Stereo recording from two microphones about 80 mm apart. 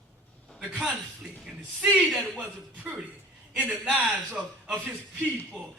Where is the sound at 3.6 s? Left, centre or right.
Centre.